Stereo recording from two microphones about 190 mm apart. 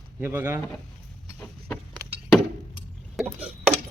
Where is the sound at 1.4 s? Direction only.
10° left (ahead or behind).